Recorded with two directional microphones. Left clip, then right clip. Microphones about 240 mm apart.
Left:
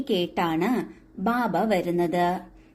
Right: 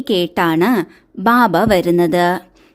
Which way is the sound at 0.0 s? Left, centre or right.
Right.